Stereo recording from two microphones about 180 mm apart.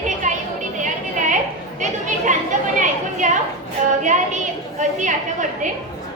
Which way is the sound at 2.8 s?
45° right (ahead or behind).